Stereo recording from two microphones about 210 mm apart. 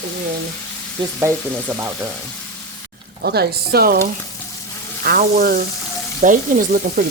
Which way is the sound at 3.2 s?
50° right (ahead or behind).